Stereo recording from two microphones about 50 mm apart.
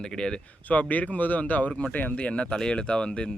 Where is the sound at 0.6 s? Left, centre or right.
Left.